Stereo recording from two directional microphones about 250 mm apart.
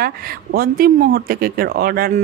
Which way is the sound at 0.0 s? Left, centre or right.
Right.